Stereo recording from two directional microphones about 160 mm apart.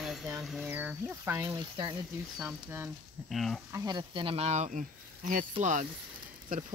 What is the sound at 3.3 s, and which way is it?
Speech, centre (ahead or behind).